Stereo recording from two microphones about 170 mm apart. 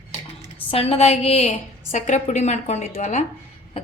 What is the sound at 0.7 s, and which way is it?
A woman's voice, 35° left (ahead or behind).